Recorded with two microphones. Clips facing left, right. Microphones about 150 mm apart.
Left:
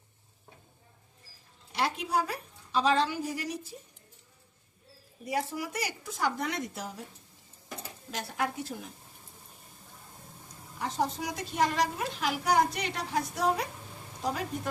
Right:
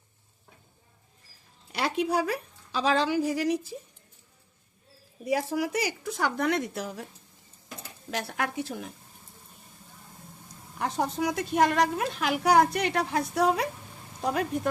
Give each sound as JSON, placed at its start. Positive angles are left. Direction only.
{"t": 1.7, "sound": "a woman's voice", "side_deg": -75}
{"t": 5.3, "sound": "speech", "side_deg": -90}
{"t": 8.1, "sound": "speech", "side_deg": -70}
{"t": 10.8, "sound": "a woman's voice", "side_deg": -60}